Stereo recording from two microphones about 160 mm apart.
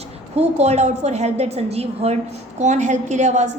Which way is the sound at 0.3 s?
45° right (ahead or behind).